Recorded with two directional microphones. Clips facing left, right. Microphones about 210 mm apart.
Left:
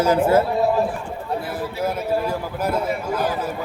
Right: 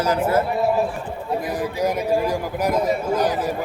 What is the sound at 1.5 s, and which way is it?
A man's voice, 15° right (ahead or behind).